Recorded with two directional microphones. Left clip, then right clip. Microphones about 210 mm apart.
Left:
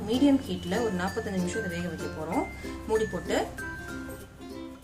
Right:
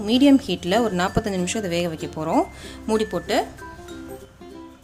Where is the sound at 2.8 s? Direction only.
40° right (ahead or behind).